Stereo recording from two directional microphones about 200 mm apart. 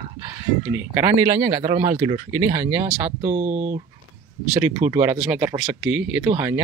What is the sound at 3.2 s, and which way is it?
Speech, 35° right (ahead or behind).